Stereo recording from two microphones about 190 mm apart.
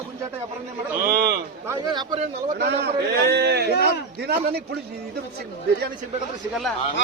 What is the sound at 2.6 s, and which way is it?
A man's voice, 60° right (ahead or behind).